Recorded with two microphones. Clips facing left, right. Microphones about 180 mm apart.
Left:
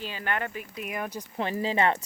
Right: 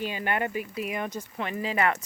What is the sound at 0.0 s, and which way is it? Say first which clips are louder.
Speech: right 3 dB; 15° right (ahead or behind).